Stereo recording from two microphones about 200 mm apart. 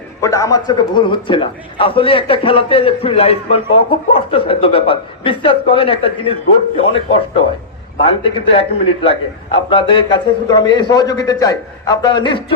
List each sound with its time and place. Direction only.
0.2 s a man's voice: 15° left (ahead or behind)